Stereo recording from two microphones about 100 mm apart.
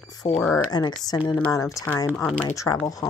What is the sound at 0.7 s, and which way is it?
Speech, 40° left (ahead or behind).